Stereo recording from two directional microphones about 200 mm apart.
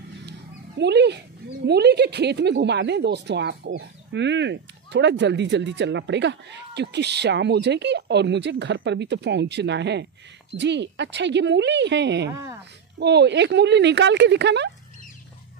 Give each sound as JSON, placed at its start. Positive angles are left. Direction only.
{"t": 0.3, "sound": "dog", "side_deg": -55}
{"t": 1.7, "sound": "speech", "side_deg": -55}
{"t": 12.3, "sound": "a woman's voice", "side_deg": -15}
{"t": 13.0, "sound": "speech", "side_deg": -60}